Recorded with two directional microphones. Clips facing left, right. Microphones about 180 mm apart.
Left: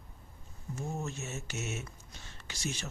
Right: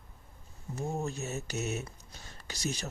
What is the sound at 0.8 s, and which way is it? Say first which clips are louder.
A man's voice: right 4 dB; 35° right (ahead or behind).